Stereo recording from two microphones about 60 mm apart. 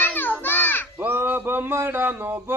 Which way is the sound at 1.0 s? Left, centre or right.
Right.